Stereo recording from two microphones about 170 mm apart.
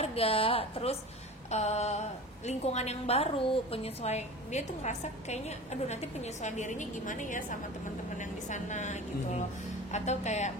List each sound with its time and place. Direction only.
0.0 s a woman's voice: 35° left (ahead or behind)